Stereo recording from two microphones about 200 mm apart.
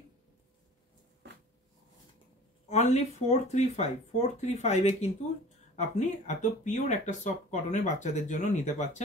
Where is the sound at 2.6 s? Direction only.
35° left (ahead or behind).